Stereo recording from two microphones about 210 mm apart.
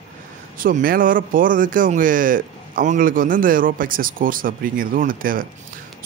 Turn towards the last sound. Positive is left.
turn(degrees=-40)  # may be behind; listen again after turning